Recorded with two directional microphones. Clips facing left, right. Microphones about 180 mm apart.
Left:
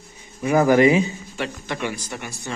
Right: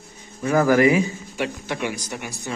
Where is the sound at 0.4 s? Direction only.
15° left (ahead or behind).